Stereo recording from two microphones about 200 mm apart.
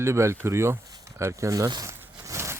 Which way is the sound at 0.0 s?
15° right (ahead or behind).